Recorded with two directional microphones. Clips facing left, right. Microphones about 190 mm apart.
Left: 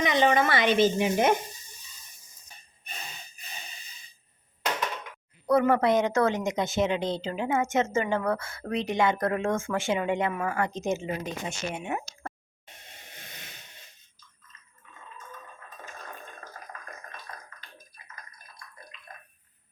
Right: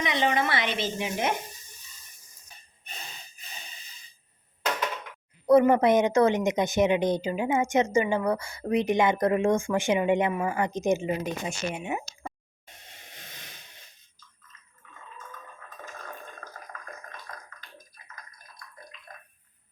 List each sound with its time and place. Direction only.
0.0 s speech: 45° left (ahead or behind)
5.5 s speech: 20° right (ahead or behind)